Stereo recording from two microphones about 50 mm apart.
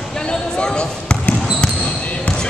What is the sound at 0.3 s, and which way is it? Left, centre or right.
Basketball bounce, centre.